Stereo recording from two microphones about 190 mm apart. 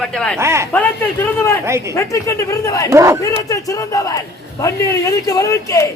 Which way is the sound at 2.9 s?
15° right (ahead or behind).